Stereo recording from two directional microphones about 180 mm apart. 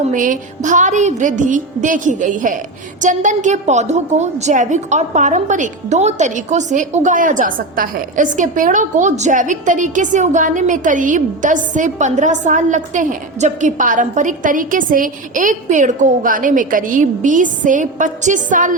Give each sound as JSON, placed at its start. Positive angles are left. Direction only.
{"t": 0.1, "sound": "a woman's voice", "side_deg": -45}